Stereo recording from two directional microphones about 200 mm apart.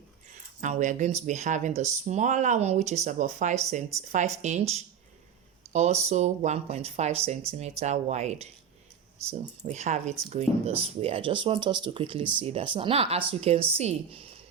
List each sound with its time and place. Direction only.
0.6 s speech: 40° right (ahead or behind)
5.7 s speech: 35° right (ahead or behind)